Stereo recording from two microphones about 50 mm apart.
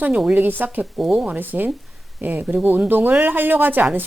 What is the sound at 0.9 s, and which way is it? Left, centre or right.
Speech, centre.